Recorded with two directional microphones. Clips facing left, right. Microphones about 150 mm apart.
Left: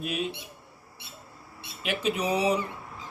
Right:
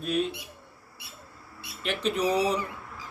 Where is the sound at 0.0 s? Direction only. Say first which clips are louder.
Right 4 dB; 10° left (ahead or behind).